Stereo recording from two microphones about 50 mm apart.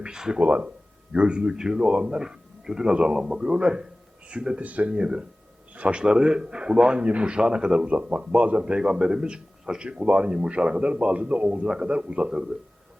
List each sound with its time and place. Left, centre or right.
0.0 s a man's voice: centre
0.3 s a man's voice: right
4.6 s speech: right
4.9 s a man's voice: centre
11.6 s a man's voice: centre